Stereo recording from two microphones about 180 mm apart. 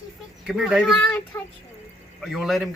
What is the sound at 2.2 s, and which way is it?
Speech, centre (ahead or behind).